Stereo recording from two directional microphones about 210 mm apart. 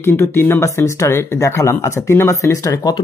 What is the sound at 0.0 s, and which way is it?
Speech, 10° left (ahead or behind).